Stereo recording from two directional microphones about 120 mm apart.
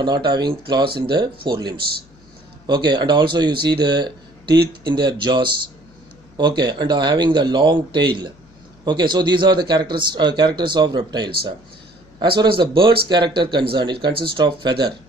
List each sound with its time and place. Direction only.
0.0 s speech: 40° right (ahead or behind)